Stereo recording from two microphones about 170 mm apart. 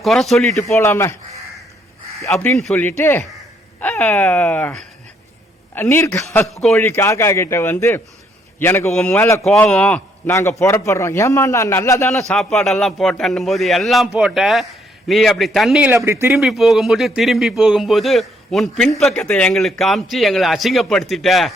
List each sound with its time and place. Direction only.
0.0 s a man's voice: centre (ahead or behind)
0.7 s a man's voice: 15° left (ahead or behind)
2.2 s a man's voice: 15° left (ahead or behind)
2.6 s a man's voice: centre (ahead or behind)
2.8 s a man's voice: 15° left (ahead or behind)
6.5 s a man's voice: centre (ahead or behind)
6.7 s a man's voice: 15° left (ahead or behind)
8.9 s a man's voice: 5° left (ahead or behind)
10.2 s a man's voice: 15° left (ahead or behind)
12.3 s a man's voice: 5° left (ahead or behind)
15.9 s speech: 15° right (ahead or behind)
16.3 s a man's voice: centre (ahead or behind)